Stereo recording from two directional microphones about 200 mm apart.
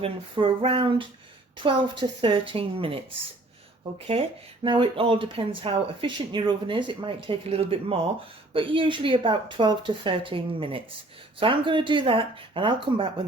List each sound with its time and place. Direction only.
0.0 s speech: 25° right (ahead or behind)